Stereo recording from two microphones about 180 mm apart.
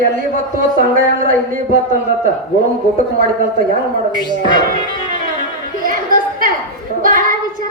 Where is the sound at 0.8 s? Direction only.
50° right (ahead or behind).